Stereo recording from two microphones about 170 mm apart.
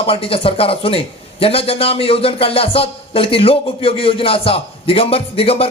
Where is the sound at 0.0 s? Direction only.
35° left (ahead or behind).